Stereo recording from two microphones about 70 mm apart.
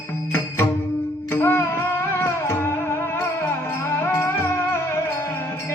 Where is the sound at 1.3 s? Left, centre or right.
Left.